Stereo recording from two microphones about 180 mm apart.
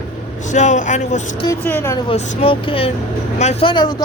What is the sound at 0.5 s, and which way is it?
Speech, 40° left (ahead or behind).